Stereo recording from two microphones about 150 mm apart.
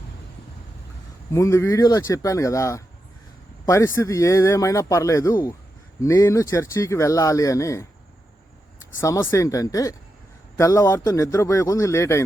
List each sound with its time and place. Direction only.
1.3 s speech: 20° left (ahead or behind)
9.0 s speech: 20° left (ahead or behind)